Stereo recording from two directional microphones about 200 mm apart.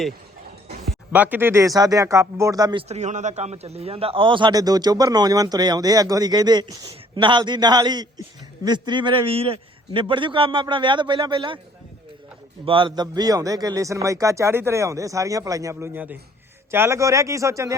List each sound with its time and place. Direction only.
0.9 s a man's voice: 10° right (ahead or behind)
2.9 s a man's voice: 35° right (ahead or behind)
12.6 s a man's voice: 25° right (ahead or behind)